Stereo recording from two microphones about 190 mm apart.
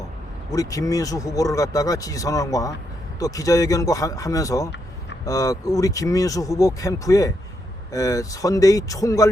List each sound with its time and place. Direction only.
0.5 s speech: 15° left (ahead or behind)